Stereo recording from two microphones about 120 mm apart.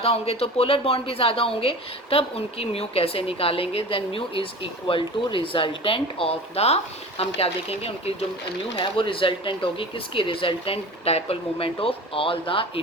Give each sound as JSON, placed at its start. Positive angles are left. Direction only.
{"t": 0.0, "sound": "a woman's voice", "side_deg": 55}
{"t": 8.7, "sound": "a woman's voice", "side_deg": 45}